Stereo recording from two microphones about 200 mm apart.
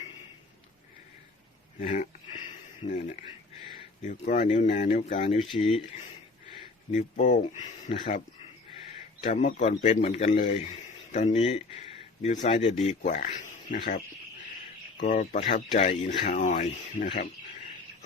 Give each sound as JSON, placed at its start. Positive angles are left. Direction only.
{"t": 1.8, "sound": "speech", "side_deg": 40}
{"t": 4.0, "sound": "speech", "side_deg": 40}
{"t": 6.9, "sound": "speech", "side_deg": 40}
{"t": 9.2, "sound": "speech", "side_deg": 35}
{"t": 15.0, "sound": "speech", "side_deg": 40}